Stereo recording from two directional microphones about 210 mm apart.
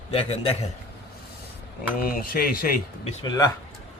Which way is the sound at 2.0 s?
45° left (ahead or behind).